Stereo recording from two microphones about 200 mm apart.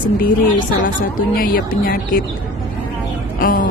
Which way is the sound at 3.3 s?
45° left (ahead or behind).